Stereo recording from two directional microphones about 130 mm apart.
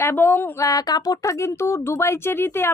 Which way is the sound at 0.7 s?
30° left (ahead or behind).